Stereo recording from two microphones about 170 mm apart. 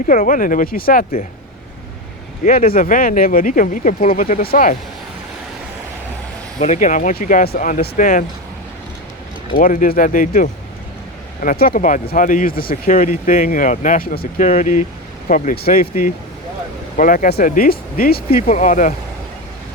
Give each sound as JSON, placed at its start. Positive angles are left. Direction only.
{"t": 0.1, "sound": "speech", "side_deg": 55}
{"t": 2.4, "sound": "speech", "side_deg": 55}
{"t": 6.6, "sound": "speech", "side_deg": 45}
{"t": 9.6, "sound": "speech", "side_deg": 55}
{"t": 18.4, "sound": "speech", "side_deg": 50}